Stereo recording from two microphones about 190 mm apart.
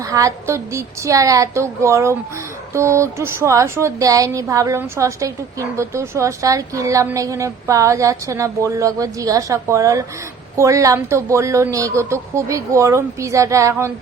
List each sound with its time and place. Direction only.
0.0 s a woman's voice: 15° right (ahead or behind)